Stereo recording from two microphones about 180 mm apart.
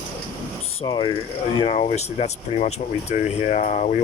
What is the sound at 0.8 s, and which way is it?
Speech, 25° left (ahead or behind).